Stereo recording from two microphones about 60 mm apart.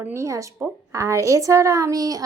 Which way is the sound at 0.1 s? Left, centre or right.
Right.